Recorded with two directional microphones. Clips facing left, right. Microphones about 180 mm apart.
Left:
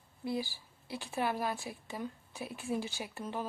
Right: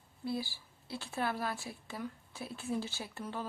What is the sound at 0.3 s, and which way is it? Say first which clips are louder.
A woman's voice: left 1 dB; 15° left (ahead or behind).